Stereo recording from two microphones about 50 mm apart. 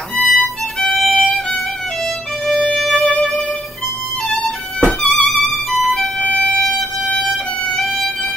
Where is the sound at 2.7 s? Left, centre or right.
Centre.